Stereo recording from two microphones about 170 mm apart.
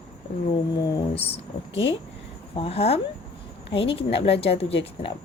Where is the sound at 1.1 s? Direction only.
35° left (ahead or behind).